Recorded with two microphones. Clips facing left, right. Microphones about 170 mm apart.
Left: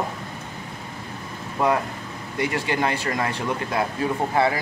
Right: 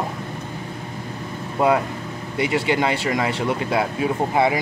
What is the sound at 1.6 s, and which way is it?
Speech, 25° right (ahead or behind).